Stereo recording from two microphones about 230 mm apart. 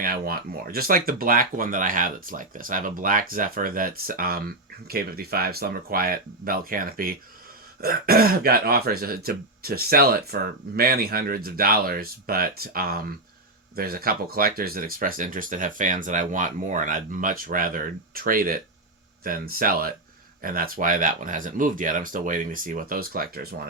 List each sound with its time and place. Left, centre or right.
0.0 s speech: right